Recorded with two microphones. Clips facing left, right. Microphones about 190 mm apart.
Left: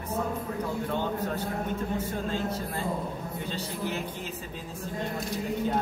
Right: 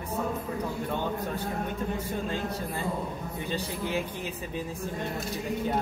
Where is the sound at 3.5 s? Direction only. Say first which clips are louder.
Right 3 dB; 15° right (ahead or behind).